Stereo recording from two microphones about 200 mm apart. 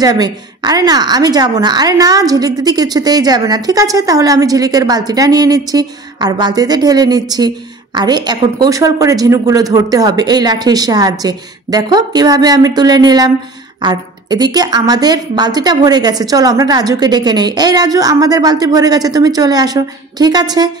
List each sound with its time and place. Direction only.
0.0 s a woman's voice: 20° right (ahead or behind)